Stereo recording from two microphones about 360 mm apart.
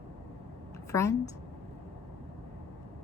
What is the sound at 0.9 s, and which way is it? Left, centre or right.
Speech, centre.